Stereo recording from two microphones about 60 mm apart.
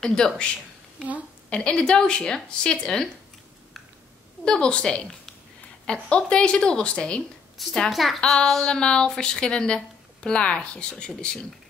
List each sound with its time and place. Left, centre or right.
0.0 s speech: centre
1.5 s speech: centre
4.5 s speech: centre
7.6 s speech: centre